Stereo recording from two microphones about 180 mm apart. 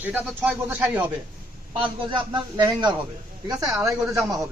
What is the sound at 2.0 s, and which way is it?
Speech, 25° right (ahead or behind).